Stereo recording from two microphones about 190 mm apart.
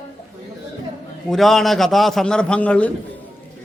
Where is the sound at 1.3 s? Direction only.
Centre (ahead or behind).